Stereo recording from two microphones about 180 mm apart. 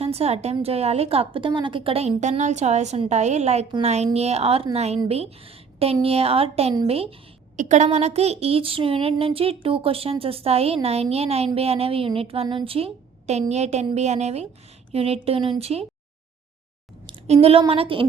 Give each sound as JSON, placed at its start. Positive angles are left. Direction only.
{"t": 0.0, "sound": "a woman's voice", "side_deg": -35}
{"t": 17.1, "sound": "a sound", "side_deg": -35}
{"t": 17.6, "sound": "a woman's voice", "side_deg": -30}